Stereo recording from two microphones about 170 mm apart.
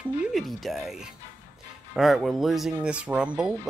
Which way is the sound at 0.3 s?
Centre (ahead or behind).